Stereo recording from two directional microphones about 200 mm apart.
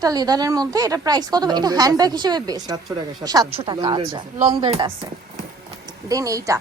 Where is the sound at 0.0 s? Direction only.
20° right (ahead or behind).